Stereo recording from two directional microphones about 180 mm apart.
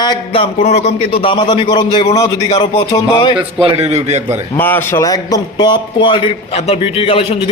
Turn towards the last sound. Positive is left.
turn(degrees=30)  # may be behind; listen again after turning